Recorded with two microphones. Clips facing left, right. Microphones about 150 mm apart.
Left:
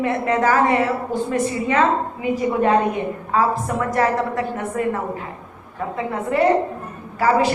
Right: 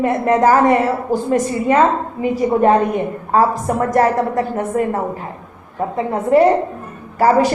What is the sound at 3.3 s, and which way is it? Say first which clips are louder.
A woman's voice: right 5 dB; 45° right (ahead or behind).